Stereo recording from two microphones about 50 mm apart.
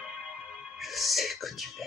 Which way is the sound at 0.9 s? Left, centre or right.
Centre.